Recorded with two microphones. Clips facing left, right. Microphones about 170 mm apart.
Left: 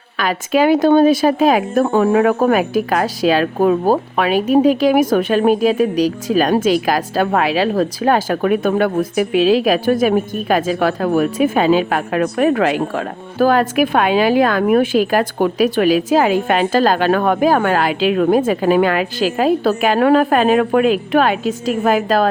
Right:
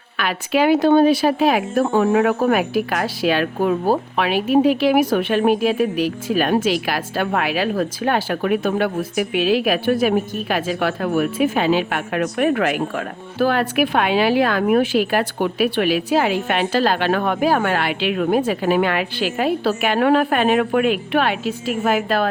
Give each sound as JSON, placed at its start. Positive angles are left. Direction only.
{"t": 0.2, "sound": "speech", "side_deg": 40}
{"t": 2.9, "sound": "a woman's voice", "side_deg": 35}
{"t": 9.3, "sound": "a woman's voice", "side_deg": 35}